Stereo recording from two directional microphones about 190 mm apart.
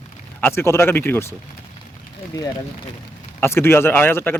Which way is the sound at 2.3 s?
20° left (ahead or behind).